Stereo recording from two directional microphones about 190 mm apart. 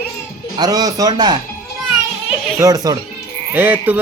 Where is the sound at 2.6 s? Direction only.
20° right (ahead or behind).